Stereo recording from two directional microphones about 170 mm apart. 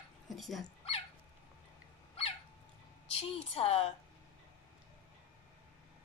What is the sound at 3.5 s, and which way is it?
Speech, 35° left (ahead or behind).